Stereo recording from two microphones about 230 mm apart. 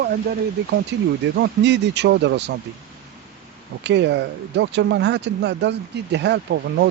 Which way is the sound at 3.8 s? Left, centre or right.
Right.